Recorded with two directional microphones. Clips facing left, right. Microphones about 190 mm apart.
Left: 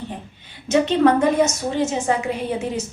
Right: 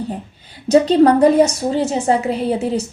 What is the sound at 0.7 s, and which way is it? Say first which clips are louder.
A woman's voice: right 5 dB; 35° right (ahead or behind).